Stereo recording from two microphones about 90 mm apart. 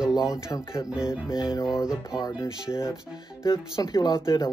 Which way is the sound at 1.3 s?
45° left (ahead or behind).